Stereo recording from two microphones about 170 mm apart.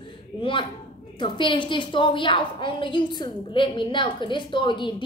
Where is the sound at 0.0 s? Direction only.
30° left (ahead or behind).